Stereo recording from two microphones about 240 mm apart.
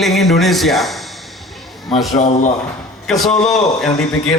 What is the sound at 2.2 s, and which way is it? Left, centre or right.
Speech, left.